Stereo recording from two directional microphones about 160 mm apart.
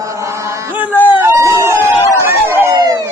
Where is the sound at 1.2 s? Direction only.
15° right (ahead or behind).